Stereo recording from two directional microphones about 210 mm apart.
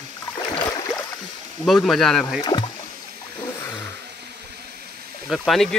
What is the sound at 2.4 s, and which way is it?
Speech, 20° left (ahead or behind).